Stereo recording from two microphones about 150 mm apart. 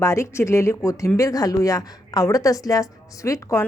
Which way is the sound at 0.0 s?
20° left (ahead or behind).